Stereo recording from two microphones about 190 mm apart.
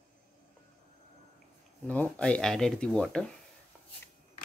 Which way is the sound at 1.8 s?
10° left (ahead or behind).